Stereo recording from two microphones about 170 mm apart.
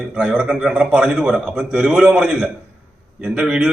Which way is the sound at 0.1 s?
10° right (ahead or behind).